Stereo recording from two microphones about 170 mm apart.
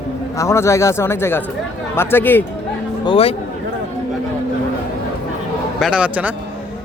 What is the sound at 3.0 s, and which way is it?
Speech, 30° left (ahead or behind).